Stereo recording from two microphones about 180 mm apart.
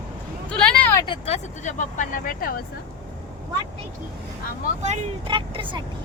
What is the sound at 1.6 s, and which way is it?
Speech, 45° left (ahead or behind).